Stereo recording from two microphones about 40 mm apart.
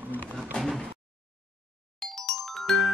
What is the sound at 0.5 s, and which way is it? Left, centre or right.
Door, left.